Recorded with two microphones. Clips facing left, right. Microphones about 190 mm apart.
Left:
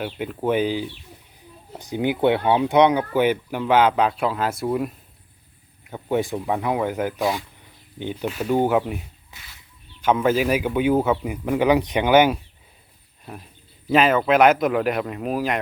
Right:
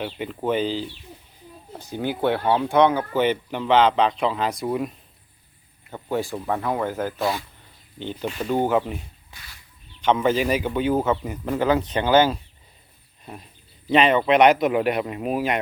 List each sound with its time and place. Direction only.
0.0 s speech: 5° left (ahead or behind)
5.9 s speech: 20° left (ahead or behind)
10.0 s speech: 5° left (ahead or behind)
13.9 s speech: 5° left (ahead or behind)